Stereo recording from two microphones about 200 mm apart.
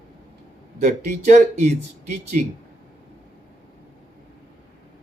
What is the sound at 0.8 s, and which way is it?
Speech, 35° right (ahead or behind).